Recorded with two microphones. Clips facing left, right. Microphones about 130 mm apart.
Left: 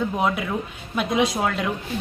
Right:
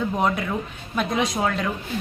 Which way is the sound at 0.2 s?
Centre (ahead or behind).